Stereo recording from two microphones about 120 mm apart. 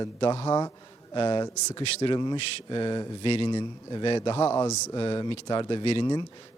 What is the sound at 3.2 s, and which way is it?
Speech, 55° left (ahead or behind).